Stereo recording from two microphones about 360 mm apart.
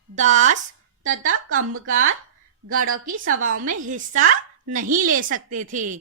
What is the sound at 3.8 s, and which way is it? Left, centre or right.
A woman's voice, right.